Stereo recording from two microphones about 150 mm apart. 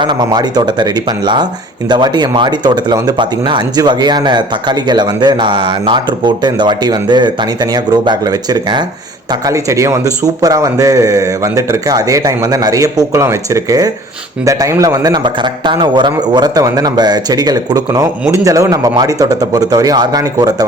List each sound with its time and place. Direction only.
0.0 s speech: 30° right (ahead or behind)